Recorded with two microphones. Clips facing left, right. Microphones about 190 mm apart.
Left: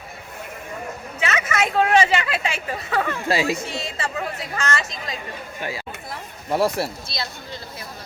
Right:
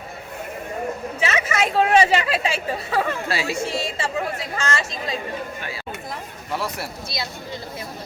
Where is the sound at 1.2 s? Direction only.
30° right (ahead or behind).